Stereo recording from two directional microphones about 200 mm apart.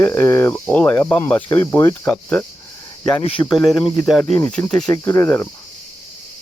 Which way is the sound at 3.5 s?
Centre (ahead or behind).